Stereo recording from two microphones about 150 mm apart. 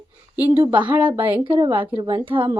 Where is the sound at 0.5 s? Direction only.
15° right (ahead or behind).